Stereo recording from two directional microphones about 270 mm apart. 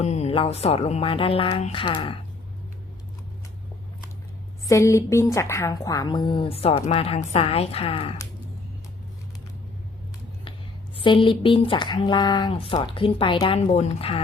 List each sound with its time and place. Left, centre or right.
0.0 s speech: left
4.7 s speech: centre
10.9 s speech: centre